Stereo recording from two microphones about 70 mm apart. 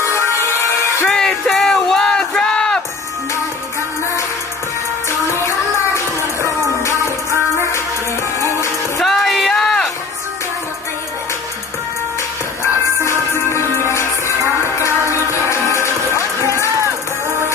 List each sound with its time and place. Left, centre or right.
0.0 s music: left
1.1 s a sound: centre
5.9 s music: left
8.4 s music: left
9.0 s a sound: centre
13.3 s music: left